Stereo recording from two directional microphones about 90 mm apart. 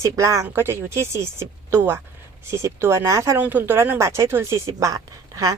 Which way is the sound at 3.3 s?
20° right (ahead or behind).